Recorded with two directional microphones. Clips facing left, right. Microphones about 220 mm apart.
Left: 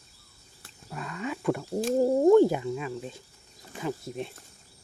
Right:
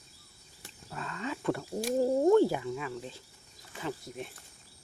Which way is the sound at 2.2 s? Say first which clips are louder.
Left 5 dB; 15° left (ahead or behind).